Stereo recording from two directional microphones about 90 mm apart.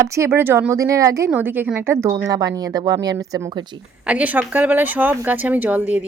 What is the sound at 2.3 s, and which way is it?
Speech, 45° right (ahead or behind).